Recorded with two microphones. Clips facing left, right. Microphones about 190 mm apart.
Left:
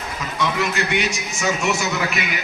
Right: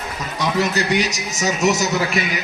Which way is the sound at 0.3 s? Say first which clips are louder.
Right 3 dB; 40° right (ahead or behind).